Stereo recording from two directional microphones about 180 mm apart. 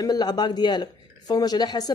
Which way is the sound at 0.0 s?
20° left (ahead or behind).